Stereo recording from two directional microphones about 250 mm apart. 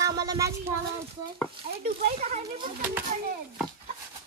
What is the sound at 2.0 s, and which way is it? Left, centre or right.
Speech, right.